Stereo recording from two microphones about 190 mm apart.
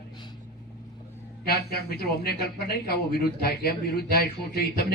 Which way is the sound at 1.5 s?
55° left (ahead or behind).